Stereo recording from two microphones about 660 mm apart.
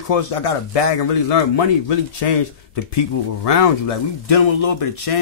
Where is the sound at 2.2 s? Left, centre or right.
Left.